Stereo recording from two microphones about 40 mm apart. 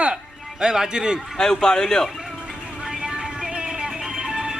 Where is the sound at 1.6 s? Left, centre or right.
Centre.